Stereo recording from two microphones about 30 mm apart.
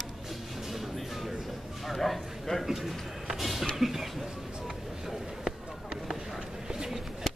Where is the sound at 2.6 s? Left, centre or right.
Centre.